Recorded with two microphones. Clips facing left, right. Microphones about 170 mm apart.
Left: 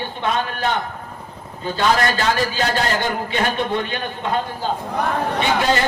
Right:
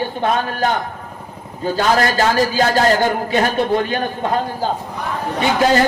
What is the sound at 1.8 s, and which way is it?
A man's voice, 40° right (ahead or behind).